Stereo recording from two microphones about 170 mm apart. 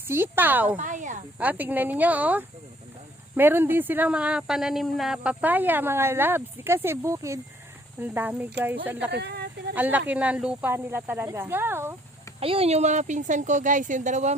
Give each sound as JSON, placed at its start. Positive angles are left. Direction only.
{"t": 0.1, "sound": "speech", "side_deg": -10}
{"t": 0.8, "sound": "speech", "side_deg": -45}
{"t": 1.4, "sound": "speech", "side_deg": -10}
{"t": 9.1, "sound": "a sound", "side_deg": -80}
{"t": 9.7, "sound": "speech", "side_deg": -10}
{"t": 12.4, "sound": "speech", "side_deg": -35}